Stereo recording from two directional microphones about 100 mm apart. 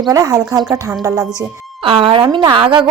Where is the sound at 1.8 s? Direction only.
60° right (ahead or behind).